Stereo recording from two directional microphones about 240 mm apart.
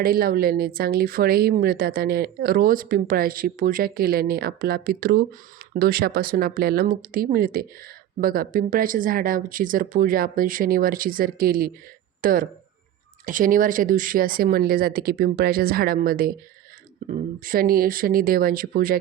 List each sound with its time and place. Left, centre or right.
0.0 s speech: right